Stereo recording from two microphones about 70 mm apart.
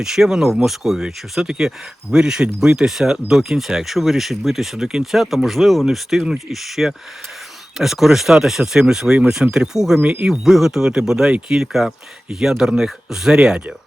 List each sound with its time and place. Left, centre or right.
0.0 s speech: centre
10.0 s speech: centre
10.4 s speech: centre